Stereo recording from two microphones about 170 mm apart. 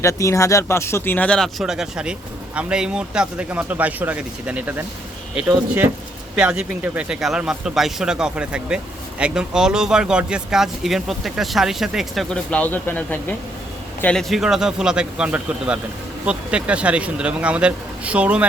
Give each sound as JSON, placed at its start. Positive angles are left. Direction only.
{"t": 0.0, "sound": "speech", "side_deg": 20}
{"t": 6.3, "sound": "speech", "side_deg": -5}